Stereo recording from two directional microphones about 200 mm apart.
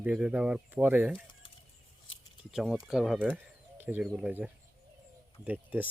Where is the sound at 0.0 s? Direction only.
5° right (ahead or behind).